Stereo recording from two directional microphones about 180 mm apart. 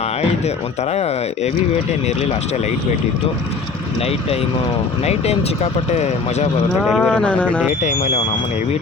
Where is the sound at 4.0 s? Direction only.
35° left (ahead or behind).